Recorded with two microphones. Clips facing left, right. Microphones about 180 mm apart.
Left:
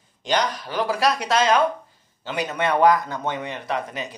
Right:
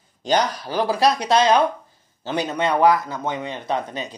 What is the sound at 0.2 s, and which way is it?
A woman's voice, 35° right (ahead or behind).